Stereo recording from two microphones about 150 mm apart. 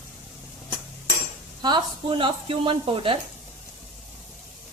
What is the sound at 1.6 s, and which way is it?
Speech, 30° right (ahead or behind).